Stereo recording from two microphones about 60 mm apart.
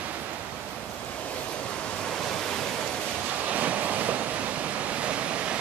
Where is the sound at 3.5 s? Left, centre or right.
Right.